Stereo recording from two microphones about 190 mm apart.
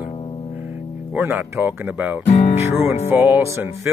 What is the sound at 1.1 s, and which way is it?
Speech, 10° right (ahead or behind).